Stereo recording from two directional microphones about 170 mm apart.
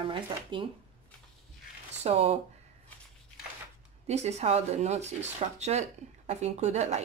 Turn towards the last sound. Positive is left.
turn(degrees=-40)  # may be behind; listen again after turning